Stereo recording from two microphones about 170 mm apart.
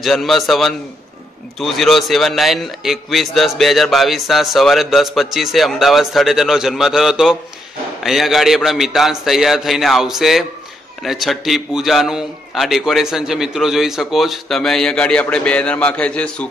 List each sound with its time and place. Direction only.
0.0 s a man's voice: centre (ahead or behind)